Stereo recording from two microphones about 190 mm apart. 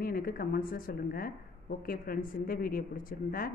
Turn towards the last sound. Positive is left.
turn(degrees=50)  # may be behind; listen again after turning